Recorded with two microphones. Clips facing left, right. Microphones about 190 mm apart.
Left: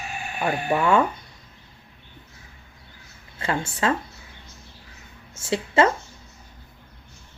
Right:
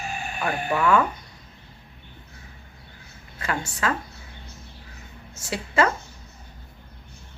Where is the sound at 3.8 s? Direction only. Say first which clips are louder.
Left 3 dB; 25° left (ahead or behind).